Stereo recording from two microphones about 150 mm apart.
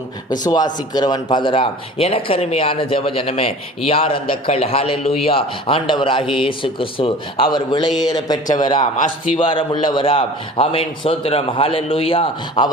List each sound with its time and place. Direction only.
0.3 s speech: 30° left (ahead or behind)